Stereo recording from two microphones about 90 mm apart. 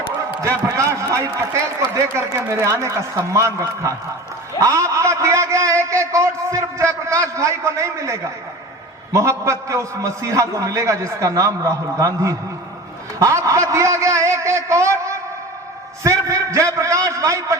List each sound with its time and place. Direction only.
0.4 s a man's voice: 35° right (ahead or behind)